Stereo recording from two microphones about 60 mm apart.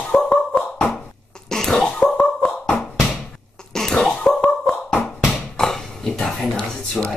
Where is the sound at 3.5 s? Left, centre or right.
Centre.